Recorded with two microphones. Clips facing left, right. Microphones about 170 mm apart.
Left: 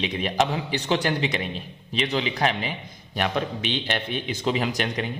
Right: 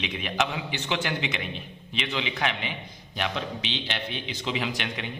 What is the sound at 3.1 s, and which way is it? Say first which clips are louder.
A man's voice: left 5 dB; 50° left (ahead or behind).